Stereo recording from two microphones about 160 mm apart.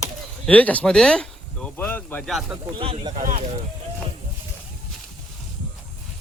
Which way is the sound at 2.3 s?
Centre (ahead or behind).